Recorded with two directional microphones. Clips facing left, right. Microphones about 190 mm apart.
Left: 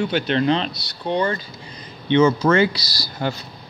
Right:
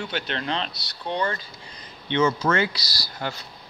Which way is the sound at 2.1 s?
25° left (ahead or behind).